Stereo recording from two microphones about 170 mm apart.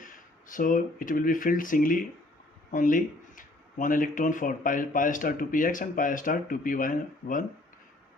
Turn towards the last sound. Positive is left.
turn(degrees=55)  # may be behind; listen again after turning